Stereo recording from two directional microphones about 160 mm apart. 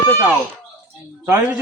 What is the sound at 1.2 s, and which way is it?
Speech, 10° right (ahead or behind).